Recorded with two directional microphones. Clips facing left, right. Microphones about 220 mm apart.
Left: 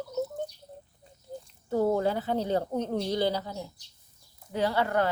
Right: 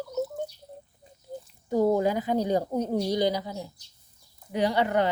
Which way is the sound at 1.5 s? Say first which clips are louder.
Right 3 dB; 15° right (ahead or behind).